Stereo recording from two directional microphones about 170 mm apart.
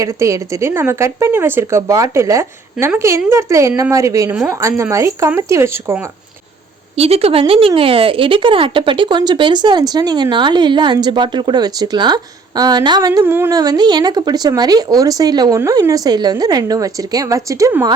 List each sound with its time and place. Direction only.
0.0 s speech: 20° right (ahead or behind)
6.9 s speech: 35° right (ahead or behind); by 17.8 s 15° right (ahead or behind)